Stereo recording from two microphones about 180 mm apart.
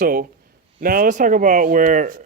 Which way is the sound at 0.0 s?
55° right (ahead or behind).